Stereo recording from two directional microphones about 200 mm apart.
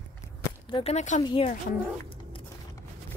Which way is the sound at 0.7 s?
30° left (ahead or behind).